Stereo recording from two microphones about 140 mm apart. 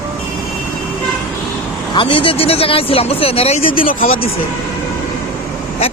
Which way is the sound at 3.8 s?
90° left.